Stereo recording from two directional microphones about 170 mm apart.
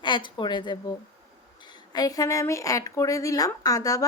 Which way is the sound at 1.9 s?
20° left (ahead or behind).